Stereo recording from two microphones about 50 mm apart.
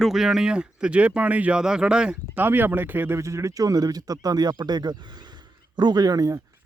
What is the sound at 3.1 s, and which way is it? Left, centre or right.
Speech, right.